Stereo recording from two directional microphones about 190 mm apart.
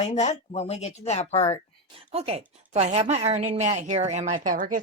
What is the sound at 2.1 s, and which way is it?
Speech, 30° right (ahead or behind).